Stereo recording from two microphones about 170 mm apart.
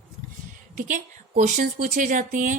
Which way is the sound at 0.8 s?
50° right (ahead or behind).